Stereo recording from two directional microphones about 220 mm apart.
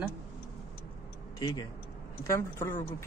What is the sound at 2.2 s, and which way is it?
Speech, 10° left (ahead or behind).